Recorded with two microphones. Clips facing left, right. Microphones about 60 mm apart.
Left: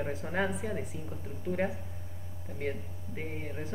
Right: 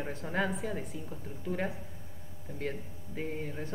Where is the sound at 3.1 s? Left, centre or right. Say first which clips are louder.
Right 2 dB; centre.